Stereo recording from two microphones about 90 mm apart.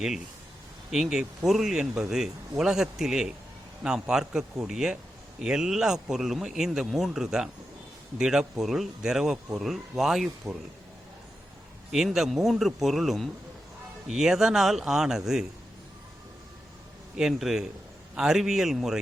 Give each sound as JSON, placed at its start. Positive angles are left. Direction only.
{"t": 0.9, "sound": "a man's voice", "side_deg": -5}
{"t": 11.9, "sound": "speech", "side_deg": -5}
{"t": 17.2, "sound": "a man's voice", "side_deg": -5}